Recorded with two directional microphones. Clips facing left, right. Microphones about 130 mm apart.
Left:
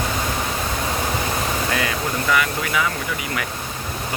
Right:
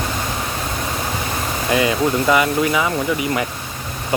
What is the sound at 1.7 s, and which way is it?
Speech, 20° right (ahead or behind).